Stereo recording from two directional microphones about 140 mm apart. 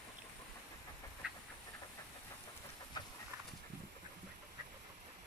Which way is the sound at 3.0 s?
30° left (ahead or behind).